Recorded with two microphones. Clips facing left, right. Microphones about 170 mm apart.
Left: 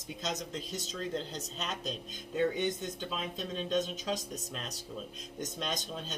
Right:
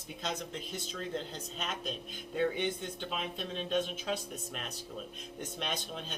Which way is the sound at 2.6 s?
40° left (ahead or behind).